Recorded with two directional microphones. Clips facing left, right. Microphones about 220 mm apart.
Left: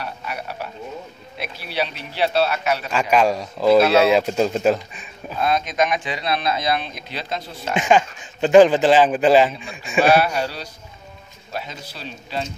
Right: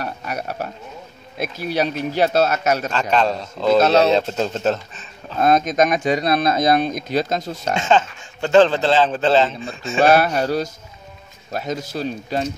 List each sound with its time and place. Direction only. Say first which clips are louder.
0.0 s speech: right 3 dB; 45° right (ahead or behind)
2.9 s a man's voice: left 1 dB; 10° left (ahead or behind)
3.8 s a man's voice: right 1 dB; 40° right (ahead or behind)
4.1 s a man's voice: left 1 dB; 10° left (ahead or behind)
5.4 s speech: right 5 dB; 45° right (ahead or behind)
7.7 s a man's voice: left 1 dB; 15° left (ahead or behind)
10.0 s speech: right 3 dB; 45° right (ahead or behind)